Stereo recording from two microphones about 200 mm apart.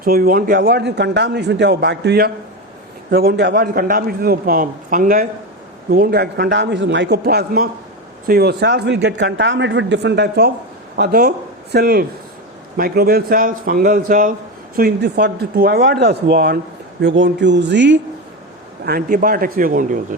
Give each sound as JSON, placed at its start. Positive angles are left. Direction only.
{"t": 0.0, "sound": "a man's voice", "side_deg": -50}
{"t": 14.8, "sound": "a man's voice", "side_deg": -55}
{"t": 18.9, "sound": "a man's voice", "side_deg": -45}